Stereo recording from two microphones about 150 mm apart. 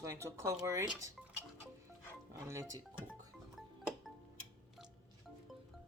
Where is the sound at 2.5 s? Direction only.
20° right (ahead or behind).